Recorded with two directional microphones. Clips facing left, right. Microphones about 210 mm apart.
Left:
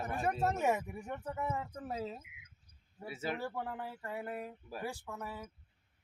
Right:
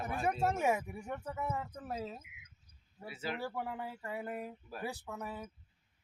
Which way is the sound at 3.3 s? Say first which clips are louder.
Even; 10° right (ahead or behind).